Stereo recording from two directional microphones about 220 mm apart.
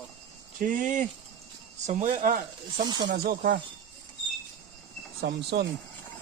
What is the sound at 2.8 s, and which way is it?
Speech, 20° right (ahead or behind).